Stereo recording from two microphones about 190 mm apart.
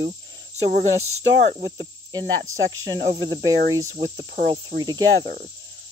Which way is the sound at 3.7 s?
20° right (ahead or behind).